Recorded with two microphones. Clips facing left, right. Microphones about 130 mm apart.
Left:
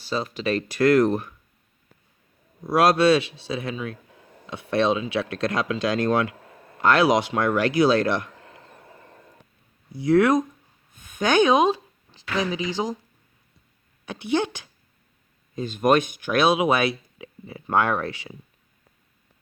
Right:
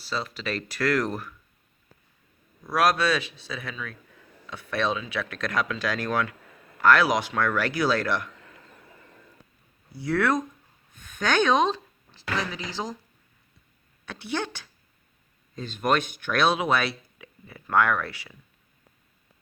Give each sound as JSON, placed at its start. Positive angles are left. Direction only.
{"t": 0.0, "sound": "speech", "side_deg": 15}
{"t": 2.6, "sound": "speech", "side_deg": 25}
{"t": 6.3, "sound": "speech", "side_deg": 35}
{"t": 8.3, "sound": "a sound", "side_deg": 30}
{"t": 9.9, "sound": "speech", "side_deg": 20}
{"t": 14.0, "sound": "speech", "side_deg": 15}